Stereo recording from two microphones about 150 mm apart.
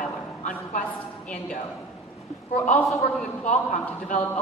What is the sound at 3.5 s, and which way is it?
Speech, 55° left (ahead or behind).